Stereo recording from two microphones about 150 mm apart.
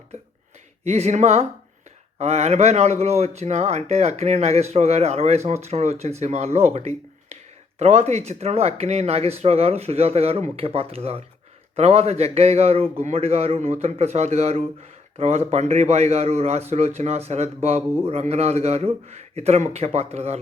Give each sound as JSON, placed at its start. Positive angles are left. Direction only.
{"t": 0.9, "sound": "speech", "side_deg": -45}